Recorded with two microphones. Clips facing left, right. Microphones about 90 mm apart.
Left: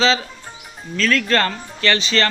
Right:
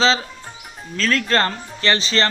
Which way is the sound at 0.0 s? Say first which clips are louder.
Even; 30° right (ahead or behind).